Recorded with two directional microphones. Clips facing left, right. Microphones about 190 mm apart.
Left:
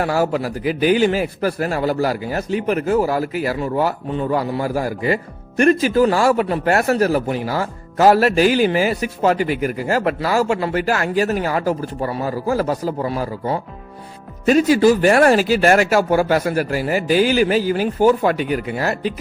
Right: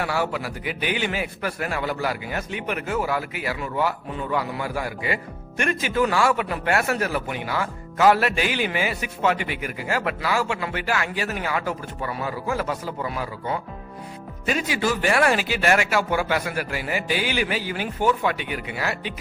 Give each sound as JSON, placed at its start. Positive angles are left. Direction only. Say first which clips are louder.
{"t": 0.0, "sound": "a man's voice", "louder": "left 7 dB", "side_deg": 40}